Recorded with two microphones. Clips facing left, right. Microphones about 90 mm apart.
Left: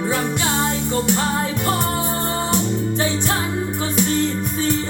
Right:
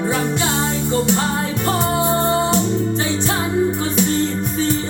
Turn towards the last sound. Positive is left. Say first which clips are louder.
# right 2 dB
turn(degrees=-20)  # may be behind; listen again after turning